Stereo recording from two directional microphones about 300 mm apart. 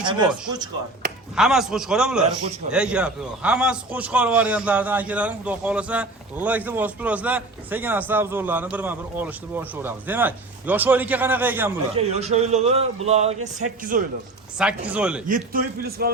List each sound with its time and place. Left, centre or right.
0.0 s speech: centre
1.4 s a man's voice: centre
11.9 s speech: right
14.6 s a man's voice: centre
15.3 s speech: right